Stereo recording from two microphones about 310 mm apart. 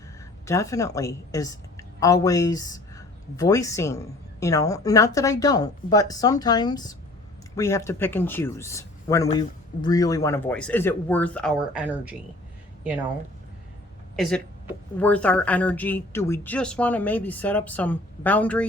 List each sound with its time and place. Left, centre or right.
0.4 s a woman's voice: centre
14.2 s speech: centre